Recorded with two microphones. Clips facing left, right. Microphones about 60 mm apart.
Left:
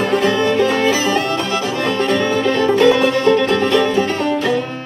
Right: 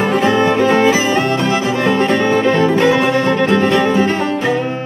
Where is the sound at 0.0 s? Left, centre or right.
Right.